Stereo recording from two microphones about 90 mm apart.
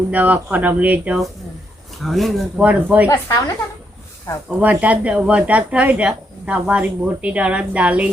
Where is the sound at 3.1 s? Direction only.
45° left (ahead or behind).